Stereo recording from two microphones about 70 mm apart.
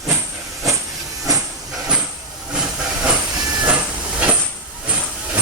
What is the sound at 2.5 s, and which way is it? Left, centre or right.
Hiss, centre.